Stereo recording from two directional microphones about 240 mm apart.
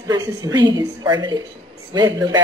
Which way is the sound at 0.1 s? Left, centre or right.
Centre.